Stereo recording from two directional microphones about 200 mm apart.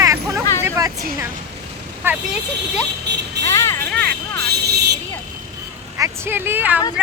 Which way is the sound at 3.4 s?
15° left (ahead or behind).